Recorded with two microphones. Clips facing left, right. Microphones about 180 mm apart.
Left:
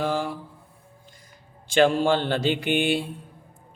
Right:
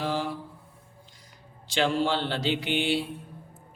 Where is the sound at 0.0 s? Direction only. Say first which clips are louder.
Left 4 dB; 50° left (ahead or behind).